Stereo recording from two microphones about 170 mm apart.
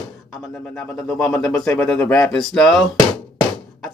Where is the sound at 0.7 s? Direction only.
5° left (ahead or behind).